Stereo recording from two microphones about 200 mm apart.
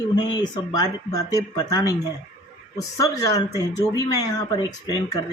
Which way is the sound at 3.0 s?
15° left (ahead or behind).